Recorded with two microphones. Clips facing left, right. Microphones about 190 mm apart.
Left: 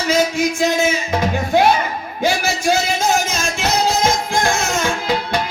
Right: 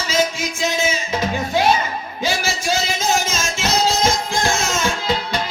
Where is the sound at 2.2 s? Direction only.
60° left (ahead or behind).